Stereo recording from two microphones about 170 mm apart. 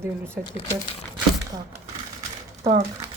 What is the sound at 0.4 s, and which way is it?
Speech, 5° right (ahead or behind).